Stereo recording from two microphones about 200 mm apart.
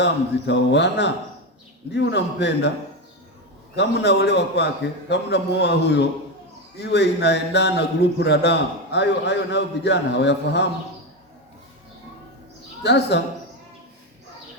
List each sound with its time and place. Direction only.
0.0 s a man's voice: 60° left (ahead or behind)
3.8 s a man's voice: 60° left (ahead or behind)
12.8 s a man's voice: 60° left (ahead or behind)